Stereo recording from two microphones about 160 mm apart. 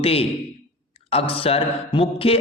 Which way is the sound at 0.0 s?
35° left (ahead or behind).